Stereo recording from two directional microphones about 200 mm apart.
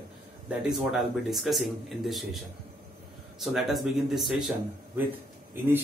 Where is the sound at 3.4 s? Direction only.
Centre (ahead or behind).